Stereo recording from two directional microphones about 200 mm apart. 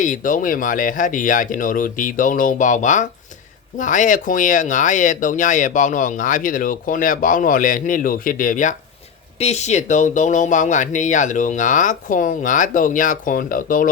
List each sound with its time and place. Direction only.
0.0 s speech: 40° left (ahead or behind)